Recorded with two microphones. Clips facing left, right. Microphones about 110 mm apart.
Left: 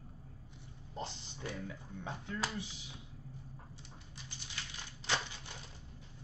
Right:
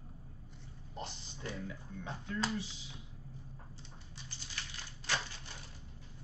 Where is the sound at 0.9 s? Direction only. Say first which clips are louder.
Left 2 dB; 20° left (ahead or behind).